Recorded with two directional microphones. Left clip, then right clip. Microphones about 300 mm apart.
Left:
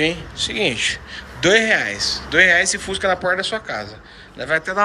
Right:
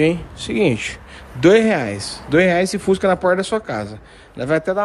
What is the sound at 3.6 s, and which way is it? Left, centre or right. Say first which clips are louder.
Speech: right 2 dB; right.